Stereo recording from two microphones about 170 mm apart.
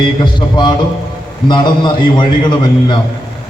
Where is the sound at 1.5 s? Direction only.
25° left (ahead or behind).